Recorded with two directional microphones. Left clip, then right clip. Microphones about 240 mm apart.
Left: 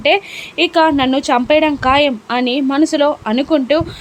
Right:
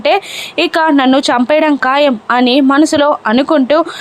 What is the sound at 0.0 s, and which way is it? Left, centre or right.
A woman's voice, centre.